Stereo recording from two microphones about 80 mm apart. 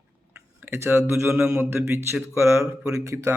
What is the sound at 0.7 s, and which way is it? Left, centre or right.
Speech, right.